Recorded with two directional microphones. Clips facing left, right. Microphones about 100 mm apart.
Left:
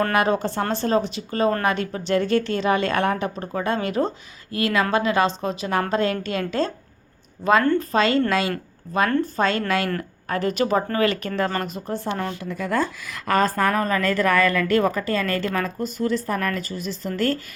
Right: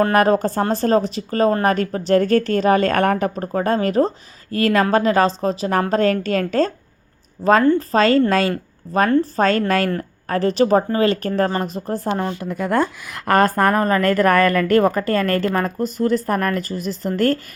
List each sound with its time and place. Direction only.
0.1 s a woman's voice: 40° right (ahead or behind)
12.4 s a woman's voice: 50° right (ahead or behind)